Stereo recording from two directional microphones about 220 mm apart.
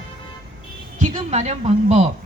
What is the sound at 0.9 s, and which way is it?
A woman's voice, 35° right (ahead or behind).